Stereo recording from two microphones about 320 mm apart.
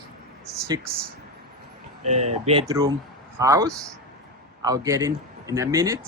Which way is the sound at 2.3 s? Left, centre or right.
Centre.